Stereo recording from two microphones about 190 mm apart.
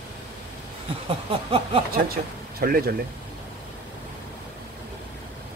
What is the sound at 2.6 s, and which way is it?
Speech, 50° right (ahead or behind).